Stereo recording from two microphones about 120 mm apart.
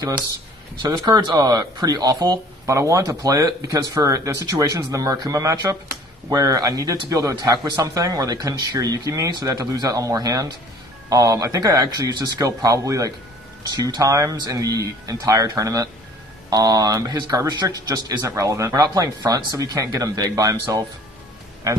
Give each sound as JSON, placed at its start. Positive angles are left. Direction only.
{"t": 0.8, "sound": "speech", "side_deg": -35}